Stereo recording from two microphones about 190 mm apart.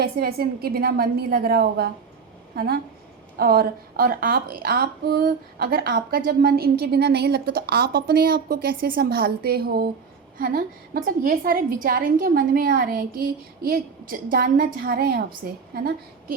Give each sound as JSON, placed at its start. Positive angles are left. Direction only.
{"t": 0.0, "sound": "a woman's voice", "side_deg": -55}
{"t": 3.3, "sound": "a woman's voice", "side_deg": -55}